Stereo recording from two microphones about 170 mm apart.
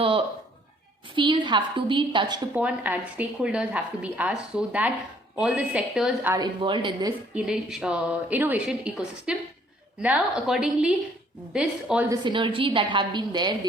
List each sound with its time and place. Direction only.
1.1 s a woman's voice: 30° right (ahead or behind)
2.6 s a woman's voice: 10° right (ahead or behind)
6.3 s a woman's voice: 25° right (ahead or behind)
7.3 s a woman's voice: 5° right (ahead or behind)
12.0 s a woman's voice: 25° right (ahead or behind)